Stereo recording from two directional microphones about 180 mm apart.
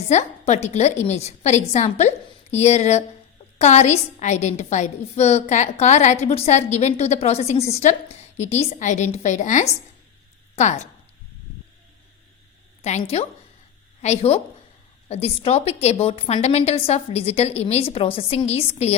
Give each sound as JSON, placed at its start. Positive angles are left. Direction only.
{"t": 0.1, "sound": "a woman's voice", "side_deg": 40}
{"t": 12.8, "sound": "a woman's voice", "side_deg": 35}